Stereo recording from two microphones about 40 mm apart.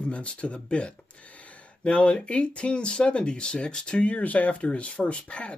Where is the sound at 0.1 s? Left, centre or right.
Left.